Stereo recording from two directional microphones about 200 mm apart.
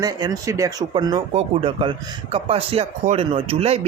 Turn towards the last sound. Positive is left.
turn(degrees=-30)  # may be behind; listen again after turning